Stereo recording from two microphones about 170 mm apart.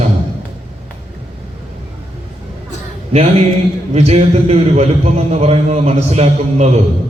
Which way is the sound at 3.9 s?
40° right (ahead or behind).